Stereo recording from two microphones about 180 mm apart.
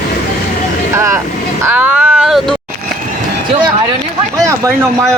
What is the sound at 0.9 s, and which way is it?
Speech, 15° right (ahead or behind).